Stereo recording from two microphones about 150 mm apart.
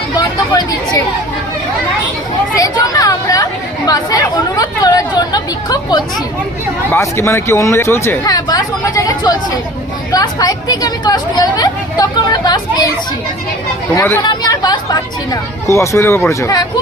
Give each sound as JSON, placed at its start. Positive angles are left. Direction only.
{"t": 0.2, "sound": "speech", "side_deg": 25}
{"t": 2.6, "sound": "speech", "side_deg": 25}
{"t": 13.9, "sound": "speech", "side_deg": 15}
{"t": 14.2, "sound": "speech", "side_deg": 25}